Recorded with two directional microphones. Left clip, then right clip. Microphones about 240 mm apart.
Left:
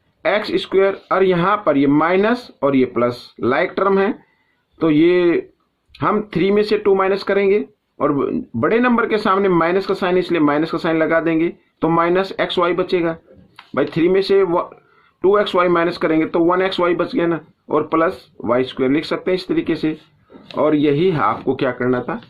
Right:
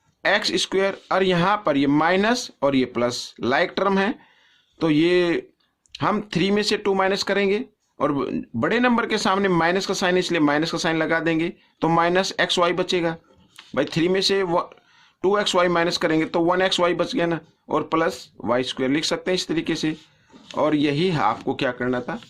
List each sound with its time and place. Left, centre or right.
0.2 s speech: right